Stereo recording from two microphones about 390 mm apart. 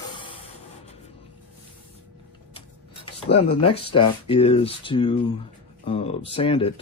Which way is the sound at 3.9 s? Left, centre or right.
Centre.